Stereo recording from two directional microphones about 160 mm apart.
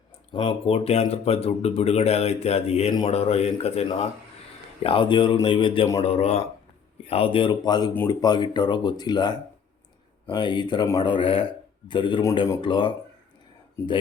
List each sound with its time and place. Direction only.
0.3 s speech: 35° left (ahead or behind)